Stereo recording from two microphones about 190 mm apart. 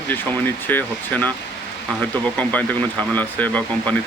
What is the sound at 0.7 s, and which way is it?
Speech, 10° left (ahead or behind).